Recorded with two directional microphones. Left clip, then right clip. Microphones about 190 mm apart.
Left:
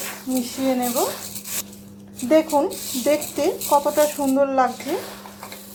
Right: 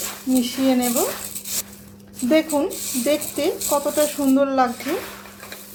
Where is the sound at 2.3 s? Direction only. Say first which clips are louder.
Left 2 dB; 5° right (ahead or behind).